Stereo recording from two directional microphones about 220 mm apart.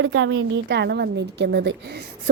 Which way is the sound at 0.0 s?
55° right (ahead or behind).